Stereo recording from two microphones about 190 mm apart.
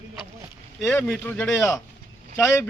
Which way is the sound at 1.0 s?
5° left (ahead or behind).